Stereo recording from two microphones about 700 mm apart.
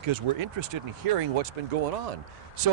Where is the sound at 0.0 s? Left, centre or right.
Right.